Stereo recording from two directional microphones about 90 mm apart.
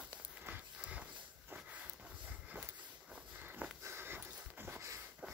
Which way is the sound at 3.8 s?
25° right (ahead or behind).